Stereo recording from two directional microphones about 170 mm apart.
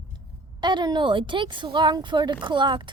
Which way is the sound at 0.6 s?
25° right (ahead or behind).